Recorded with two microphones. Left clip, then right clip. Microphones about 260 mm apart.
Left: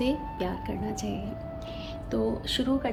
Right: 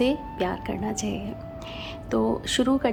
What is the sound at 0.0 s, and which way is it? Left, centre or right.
A woman's voice, centre.